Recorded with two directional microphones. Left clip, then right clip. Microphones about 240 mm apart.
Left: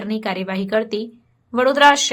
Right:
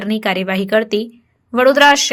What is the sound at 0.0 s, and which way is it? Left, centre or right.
A woman's voice, centre.